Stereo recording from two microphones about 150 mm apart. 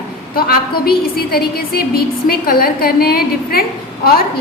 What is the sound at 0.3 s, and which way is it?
A woman's voice, 80° left.